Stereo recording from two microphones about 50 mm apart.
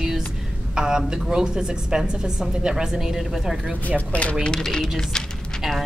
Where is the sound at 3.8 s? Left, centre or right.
Left.